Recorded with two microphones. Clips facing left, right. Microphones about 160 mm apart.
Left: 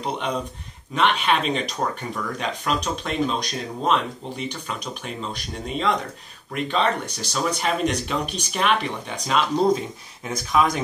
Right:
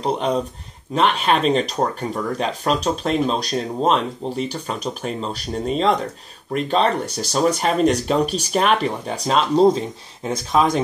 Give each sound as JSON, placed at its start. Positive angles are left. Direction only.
{"t": 0.0, "sound": "speech", "side_deg": -40}